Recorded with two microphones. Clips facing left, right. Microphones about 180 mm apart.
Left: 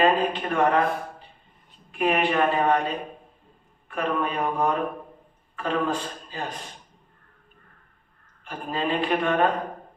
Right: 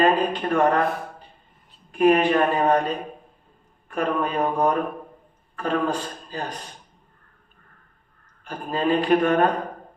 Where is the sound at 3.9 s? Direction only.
40° right (ahead or behind).